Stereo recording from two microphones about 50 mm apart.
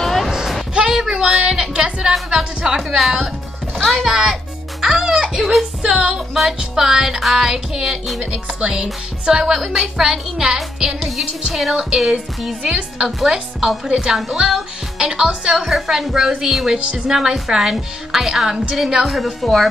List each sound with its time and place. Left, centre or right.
0.0 s a sound: centre
0.3 s a sound: centre
0.7 s a woman's voice: centre
2.3 s music: centre
3.8 s a woman's voice: centre
4.1 s music: centre
4.8 s a child's voice: centre
5.4 s a woman's voice: centre
5.8 s music: centre
15.6 s a woman's voice: centre
17.1 s music: centre
19.0 s a woman's voice: centre